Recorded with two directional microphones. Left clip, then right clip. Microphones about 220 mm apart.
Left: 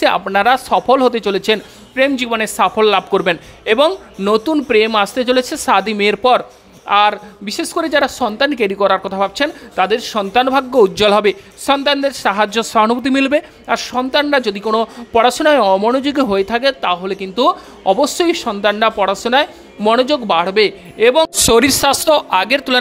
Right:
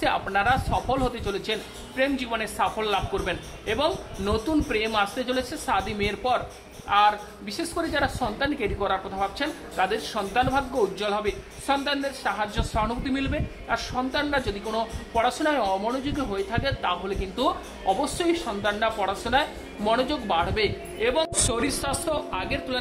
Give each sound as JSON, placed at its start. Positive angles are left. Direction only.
{"t": 0.0, "sound": "a woman's voice", "side_deg": 50}